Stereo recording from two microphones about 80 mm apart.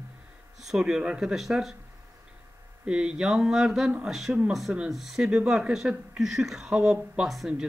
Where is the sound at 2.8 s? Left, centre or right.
Centre.